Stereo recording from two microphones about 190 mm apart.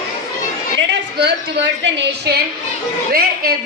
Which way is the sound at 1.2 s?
65° right (ahead or behind).